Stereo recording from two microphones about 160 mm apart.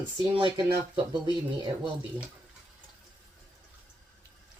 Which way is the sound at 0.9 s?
30° right (ahead or behind).